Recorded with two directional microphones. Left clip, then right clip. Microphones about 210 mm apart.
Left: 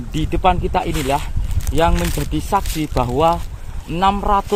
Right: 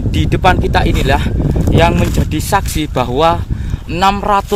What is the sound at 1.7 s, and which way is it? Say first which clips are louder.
Speech: right 4 dB; 35° right (ahead or behind).